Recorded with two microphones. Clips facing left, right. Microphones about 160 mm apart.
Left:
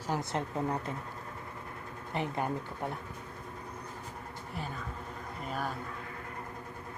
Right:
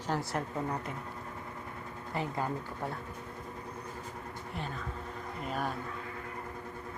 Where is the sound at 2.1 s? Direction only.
20° left (ahead or behind).